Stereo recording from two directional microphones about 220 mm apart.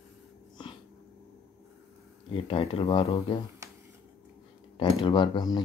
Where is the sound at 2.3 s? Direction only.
25° left (ahead or behind).